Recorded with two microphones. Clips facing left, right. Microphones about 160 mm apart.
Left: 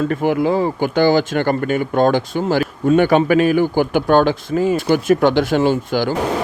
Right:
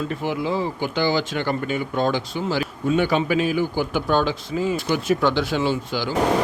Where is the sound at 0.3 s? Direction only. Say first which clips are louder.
Left 7 dB; 50° left (ahead or behind).